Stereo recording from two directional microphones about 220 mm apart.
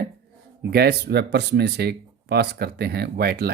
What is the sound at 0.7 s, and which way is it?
Speech, 45° right (ahead or behind).